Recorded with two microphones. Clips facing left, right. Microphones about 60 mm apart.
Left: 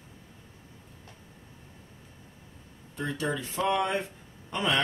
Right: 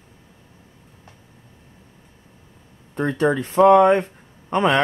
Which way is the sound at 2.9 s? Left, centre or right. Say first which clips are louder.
Right 11 dB; right.